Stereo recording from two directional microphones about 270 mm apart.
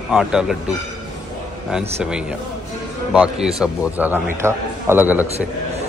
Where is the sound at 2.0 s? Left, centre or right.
Centre.